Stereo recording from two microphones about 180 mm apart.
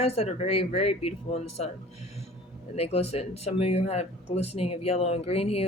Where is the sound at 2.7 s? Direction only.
35° left (ahead or behind).